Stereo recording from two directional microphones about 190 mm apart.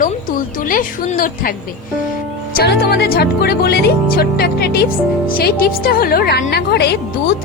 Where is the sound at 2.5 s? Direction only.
55° left (ahead or behind).